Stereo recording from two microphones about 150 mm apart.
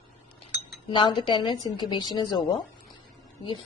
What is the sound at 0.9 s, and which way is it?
A woman's voice, 35° left (ahead or behind).